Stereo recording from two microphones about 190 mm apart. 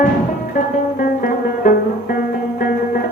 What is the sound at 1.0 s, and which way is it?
Music, 50° left (ahead or behind).